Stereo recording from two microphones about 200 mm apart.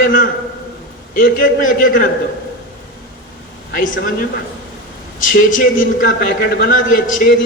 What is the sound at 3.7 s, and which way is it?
A man's voice, 45° left (ahead or behind).